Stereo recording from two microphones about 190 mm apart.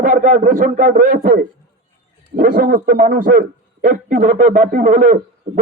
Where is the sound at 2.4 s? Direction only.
50° right (ahead or behind).